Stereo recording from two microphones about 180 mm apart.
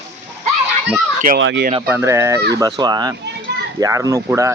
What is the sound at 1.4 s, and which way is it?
Speech, 80° right.